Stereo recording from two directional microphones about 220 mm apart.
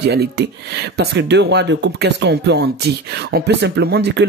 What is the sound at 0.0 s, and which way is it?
Speech, 50° right (ahead or behind).